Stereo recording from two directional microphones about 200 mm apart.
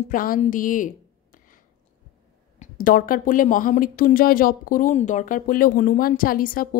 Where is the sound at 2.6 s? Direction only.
45° left (ahead or behind).